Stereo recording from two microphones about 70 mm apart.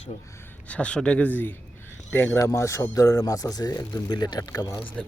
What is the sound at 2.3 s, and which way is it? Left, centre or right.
Speech, left.